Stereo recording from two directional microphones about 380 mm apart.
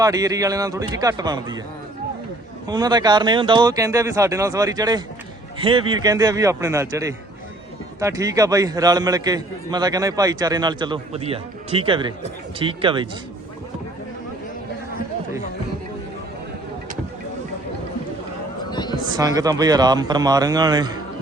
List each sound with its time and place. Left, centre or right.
0.0 s a man's voice: centre
2.6 s a man's voice: centre
18.7 s a sound: centre
19.0 s a man's voice: centre